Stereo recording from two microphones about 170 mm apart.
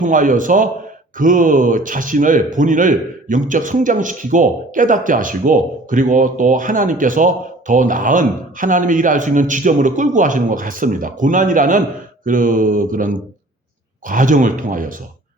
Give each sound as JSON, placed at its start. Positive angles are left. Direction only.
{"t": 0.0, "sound": "a man's voice", "side_deg": -50}